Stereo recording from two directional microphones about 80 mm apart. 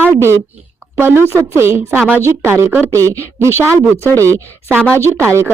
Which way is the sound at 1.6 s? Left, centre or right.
Right.